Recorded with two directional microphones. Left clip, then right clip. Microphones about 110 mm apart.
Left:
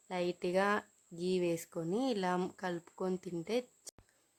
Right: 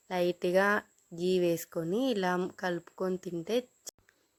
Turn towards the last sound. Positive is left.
turn(degrees=-20)  # may be behind; listen again after turning